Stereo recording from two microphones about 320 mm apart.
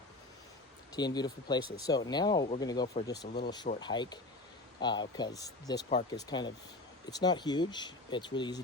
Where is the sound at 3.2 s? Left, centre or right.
Left.